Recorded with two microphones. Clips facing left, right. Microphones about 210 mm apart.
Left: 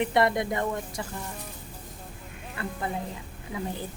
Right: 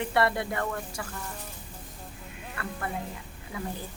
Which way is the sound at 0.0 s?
20° left (ahead or behind).